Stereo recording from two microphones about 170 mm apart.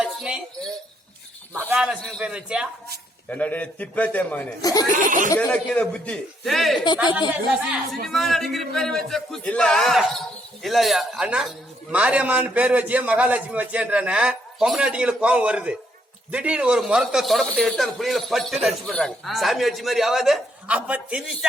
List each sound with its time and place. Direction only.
0.0 s a sound: 5° right (ahead or behind)
1.6 s a man's voice: 5° right (ahead or behind)
3.2 s a man's voice: 10° left (ahead or behind)
4.6 s speech: 20° left (ahead or behind)
5.0 s speech: 50° right (ahead or behind)
5.3 s a man's voice: 10° left (ahead or behind)
6.8 s speech: 25° left (ahead or behind)
8.0 s a man's voice: centre (ahead or behind)